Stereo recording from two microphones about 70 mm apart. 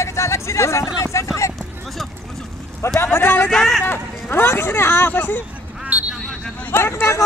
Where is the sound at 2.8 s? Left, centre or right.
Left.